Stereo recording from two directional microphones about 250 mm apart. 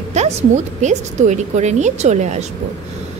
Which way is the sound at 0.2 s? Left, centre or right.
Right.